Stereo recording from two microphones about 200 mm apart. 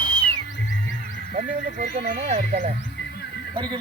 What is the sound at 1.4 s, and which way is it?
Speech, 40° right (ahead or behind).